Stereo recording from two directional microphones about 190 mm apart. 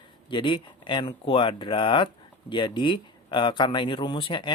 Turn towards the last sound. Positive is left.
turn(degrees=25)  # may be behind; listen again after turning